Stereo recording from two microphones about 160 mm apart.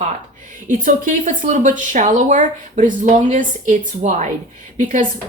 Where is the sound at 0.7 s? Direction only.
55° right (ahead or behind).